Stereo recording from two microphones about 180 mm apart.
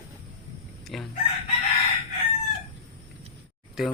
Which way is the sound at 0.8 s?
Centre (ahead or behind).